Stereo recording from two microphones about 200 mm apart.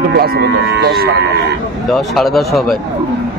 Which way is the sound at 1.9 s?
Centre (ahead or behind).